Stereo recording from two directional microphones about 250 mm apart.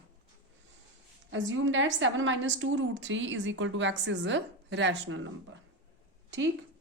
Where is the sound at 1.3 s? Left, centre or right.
Right.